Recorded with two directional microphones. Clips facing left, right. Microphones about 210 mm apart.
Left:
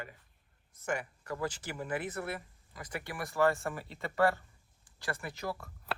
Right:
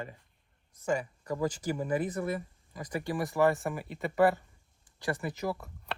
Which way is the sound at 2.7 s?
20° right (ahead or behind).